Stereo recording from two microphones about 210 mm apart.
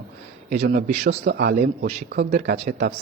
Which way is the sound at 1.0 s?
50° right (ahead or behind).